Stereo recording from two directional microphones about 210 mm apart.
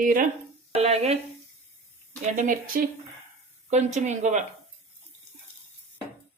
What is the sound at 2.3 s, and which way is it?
Speech, 40° right (ahead or behind).